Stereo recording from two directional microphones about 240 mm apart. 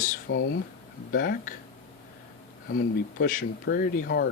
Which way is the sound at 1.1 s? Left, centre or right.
Left.